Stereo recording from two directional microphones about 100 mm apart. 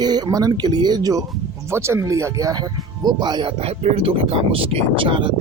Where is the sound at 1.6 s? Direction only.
25° right (ahead or behind); by 5.3 s 55° right (ahead or behind).